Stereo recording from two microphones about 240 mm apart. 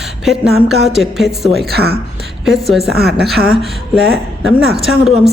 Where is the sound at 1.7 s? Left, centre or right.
Right.